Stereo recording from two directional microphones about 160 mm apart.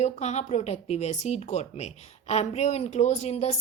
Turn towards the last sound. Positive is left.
turn(degrees=40)  # may be behind; listen again after turning